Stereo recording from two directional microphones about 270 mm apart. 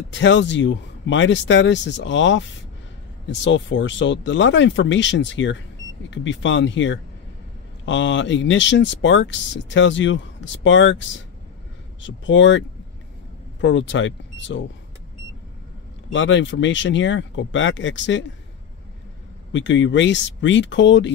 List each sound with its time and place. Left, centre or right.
0.1 s speech: left
16.1 s speech: left
19.5 s speech: left